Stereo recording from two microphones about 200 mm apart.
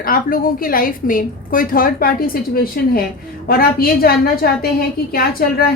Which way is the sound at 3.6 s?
50° left (ahead or behind).